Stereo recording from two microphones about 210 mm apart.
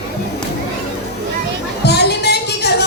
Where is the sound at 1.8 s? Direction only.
50° left (ahead or behind).